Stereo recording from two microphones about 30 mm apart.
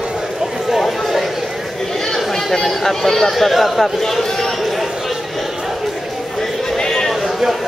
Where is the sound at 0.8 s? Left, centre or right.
Centre.